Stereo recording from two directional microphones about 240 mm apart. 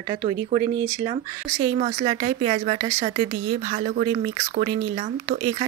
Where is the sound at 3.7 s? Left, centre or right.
Right.